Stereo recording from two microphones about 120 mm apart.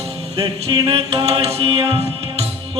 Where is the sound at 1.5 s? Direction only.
45° right (ahead or behind).